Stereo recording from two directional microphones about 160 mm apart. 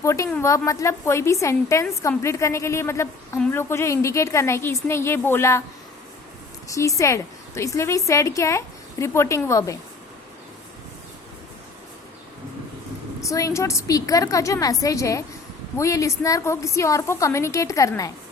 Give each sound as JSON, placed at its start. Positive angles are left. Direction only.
{"t": 0.0, "sound": "a sound", "side_deg": 20}
{"t": 0.4, "sound": "a woman's voice", "side_deg": 20}
{"t": 6.7, "sound": "a woman's voice", "side_deg": 20}
{"t": 13.2, "sound": "a woman's voice", "side_deg": 20}